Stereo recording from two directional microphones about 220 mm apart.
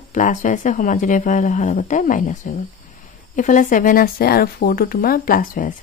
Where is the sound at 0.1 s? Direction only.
35° left (ahead or behind).